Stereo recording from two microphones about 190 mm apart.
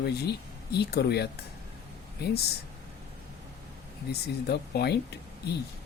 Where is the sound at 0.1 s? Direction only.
60° left (ahead or behind).